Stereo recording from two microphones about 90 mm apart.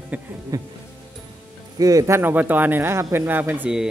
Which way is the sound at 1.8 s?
40° right (ahead or behind).